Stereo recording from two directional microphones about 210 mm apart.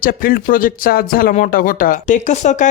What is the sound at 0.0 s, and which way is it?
Speech, 40° left (ahead or behind).